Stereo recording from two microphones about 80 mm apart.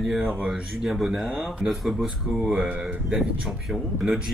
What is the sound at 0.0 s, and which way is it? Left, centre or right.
Speech, centre.